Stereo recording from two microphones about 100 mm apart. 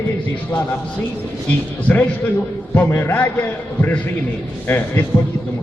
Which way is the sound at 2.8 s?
25° left (ahead or behind).